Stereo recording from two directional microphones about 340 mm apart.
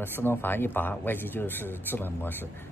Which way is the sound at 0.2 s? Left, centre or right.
Centre.